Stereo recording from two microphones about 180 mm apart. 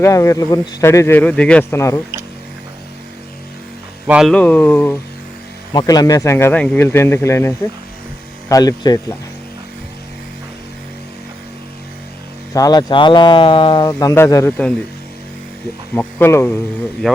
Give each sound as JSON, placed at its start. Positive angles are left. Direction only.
{"t": 0.0, "sound": "a man's voice", "side_deg": 15}
{"t": 4.0, "sound": "speech", "side_deg": -5}
{"t": 4.3, "sound": "a man's voice", "side_deg": 10}
{"t": 5.7, "sound": "a man's voice", "side_deg": 20}
{"t": 12.5, "sound": "speech", "side_deg": 20}
{"t": 16.0, "sound": "a man's voice", "side_deg": 15}